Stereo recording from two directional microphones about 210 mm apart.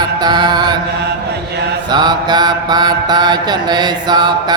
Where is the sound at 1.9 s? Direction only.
20° right (ahead or behind).